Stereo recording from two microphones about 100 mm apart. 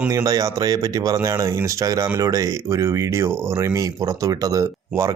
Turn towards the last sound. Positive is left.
turn(degrees=-30)  # may be behind; listen again after turning